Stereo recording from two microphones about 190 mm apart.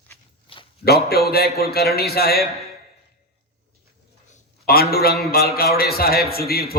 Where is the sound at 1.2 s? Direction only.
55° left (ahead or behind).